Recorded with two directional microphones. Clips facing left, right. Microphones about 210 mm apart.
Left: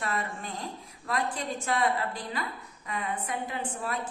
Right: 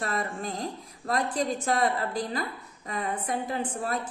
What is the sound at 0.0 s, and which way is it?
A woman's voice, 40° right (ahead or behind).